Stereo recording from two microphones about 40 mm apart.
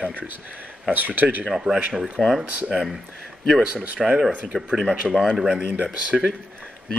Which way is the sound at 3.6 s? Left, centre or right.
Right.